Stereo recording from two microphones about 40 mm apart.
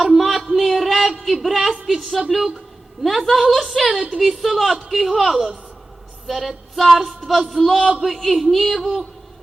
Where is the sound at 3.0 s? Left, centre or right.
Centre.